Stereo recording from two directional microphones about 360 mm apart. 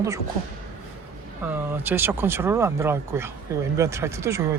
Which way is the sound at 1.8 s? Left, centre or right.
Centre.